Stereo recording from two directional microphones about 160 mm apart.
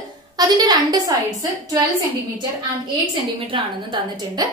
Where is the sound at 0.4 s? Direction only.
25° right (ahead or behind).